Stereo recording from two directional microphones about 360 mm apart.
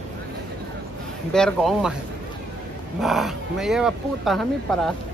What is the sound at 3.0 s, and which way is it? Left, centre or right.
Speech, centre.